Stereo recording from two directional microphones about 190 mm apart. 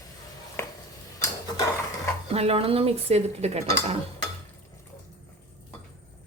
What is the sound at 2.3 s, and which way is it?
Speech, 30° right (ahead or behind).